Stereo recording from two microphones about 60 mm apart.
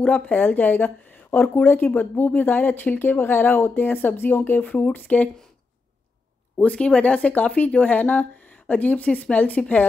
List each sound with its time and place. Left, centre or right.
0.0 s a woman's voice: centre
0.4 s a woman's voice: left
6.5 s speech: left